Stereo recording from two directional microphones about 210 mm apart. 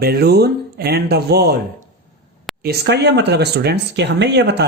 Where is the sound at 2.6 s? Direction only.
50° right (ahead or behind).